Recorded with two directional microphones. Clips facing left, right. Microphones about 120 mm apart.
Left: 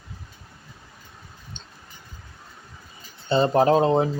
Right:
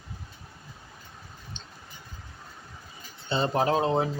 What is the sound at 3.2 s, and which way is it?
Speech, 40° left (ahead or behind).